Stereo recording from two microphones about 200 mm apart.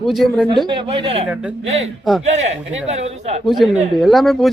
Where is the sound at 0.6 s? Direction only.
25° right (ahead or behind).